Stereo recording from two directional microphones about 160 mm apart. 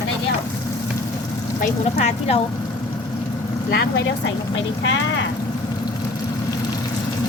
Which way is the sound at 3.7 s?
90° left.